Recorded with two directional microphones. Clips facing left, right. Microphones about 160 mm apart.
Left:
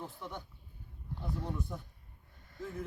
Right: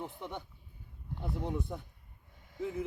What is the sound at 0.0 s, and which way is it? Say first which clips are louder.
Speech: right 3 dB; 20° right (ahead or behind).